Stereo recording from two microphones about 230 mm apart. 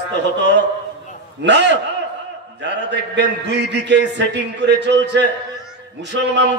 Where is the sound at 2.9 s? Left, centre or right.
Right.